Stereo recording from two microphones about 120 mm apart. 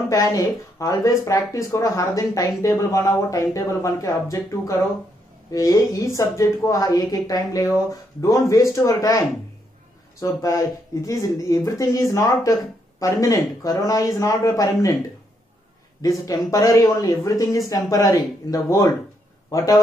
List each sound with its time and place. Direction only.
0.1 s speech: 25° left (ahead or behind)
10.2 s speech: 25° left (ahead or behind)
16.0 s speech: 30° left (ahead or behind)